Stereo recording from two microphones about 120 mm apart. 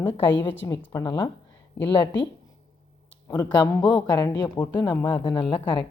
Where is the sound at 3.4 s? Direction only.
35° left (ahead or behind).